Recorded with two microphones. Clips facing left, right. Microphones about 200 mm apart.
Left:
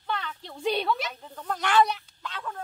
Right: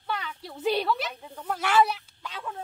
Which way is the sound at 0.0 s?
10° right (ahead or behind).